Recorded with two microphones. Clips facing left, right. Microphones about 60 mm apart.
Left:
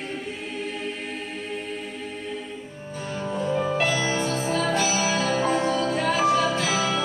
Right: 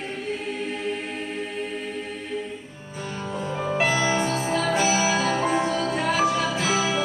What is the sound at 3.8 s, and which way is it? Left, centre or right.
Music, right.